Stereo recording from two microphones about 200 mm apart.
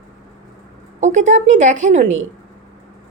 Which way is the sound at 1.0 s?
35° right (ahead or behind).